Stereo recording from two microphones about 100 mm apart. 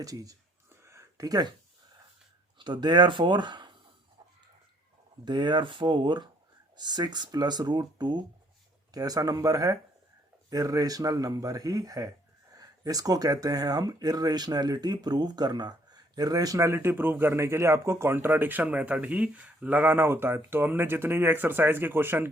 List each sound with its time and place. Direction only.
0.0 s speech: 35° right (ahead or behind)
0.9 s a sound: 35° right (ahead or behind)
2.6 s speech: 50° right (ahead or behind)
5.2 s speech: 50° right (ahead or behind); by 22.3 s 20° right (ahead or behind)